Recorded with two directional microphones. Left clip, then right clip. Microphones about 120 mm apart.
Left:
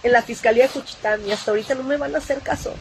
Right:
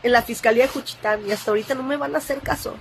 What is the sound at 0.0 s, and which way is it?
Speech, 30° right (ahead or behind).